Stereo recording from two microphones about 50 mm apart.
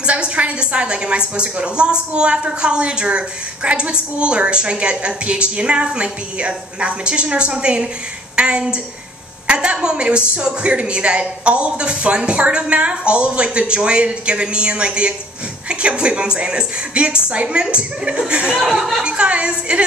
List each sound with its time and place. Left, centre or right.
0.0 s a woman's voice: right